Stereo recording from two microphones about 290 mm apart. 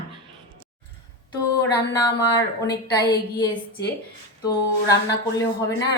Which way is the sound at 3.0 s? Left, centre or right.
Centre.